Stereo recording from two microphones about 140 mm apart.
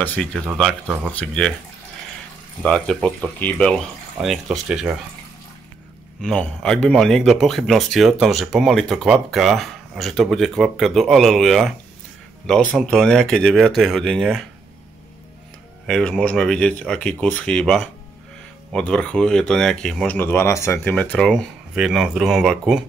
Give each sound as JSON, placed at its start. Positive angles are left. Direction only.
{"t": 0.0, "sound": "speech", "side_deg": 10}
{"t": 0.8, "sound": "speech", "side_deg": -10}
{"t": 1.1, "sound": "speech", "side_deg": 5}
{"t": 2.6, "sound": "speech", "side_deg": 5}
{"t": 6.2, "sound": "speech", "side_deg": 5}
{"t": 15.9, "sound": "speech", "side_deg": 5}
{"t": 20.2, "sound": "speech", "side_deg": 15}